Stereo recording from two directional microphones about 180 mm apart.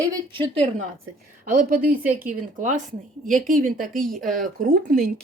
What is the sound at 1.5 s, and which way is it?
Speech, 50° right (ahead or behind).